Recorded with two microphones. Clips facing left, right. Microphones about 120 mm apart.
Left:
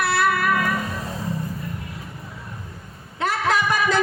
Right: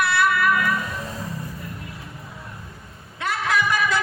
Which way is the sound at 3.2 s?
30° left (ahead or behind).